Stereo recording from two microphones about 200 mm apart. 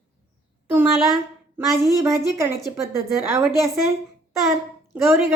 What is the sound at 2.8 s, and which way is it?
Speech, 15° right (ahead or behind).